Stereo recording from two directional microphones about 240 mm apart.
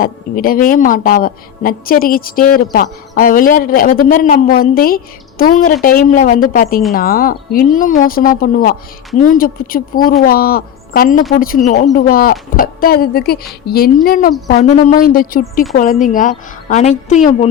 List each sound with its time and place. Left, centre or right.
0.0 s speech: left